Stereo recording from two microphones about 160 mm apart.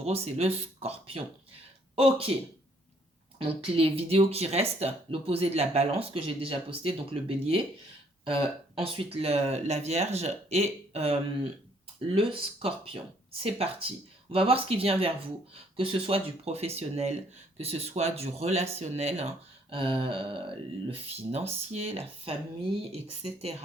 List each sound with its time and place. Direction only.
0.0 s speech: 40° right (ahead or behind)
3.3 s speech: 35° right (ahead or behind)